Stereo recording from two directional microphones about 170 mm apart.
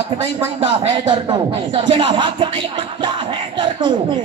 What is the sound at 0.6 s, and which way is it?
Speech, 30° right (ahead or behind).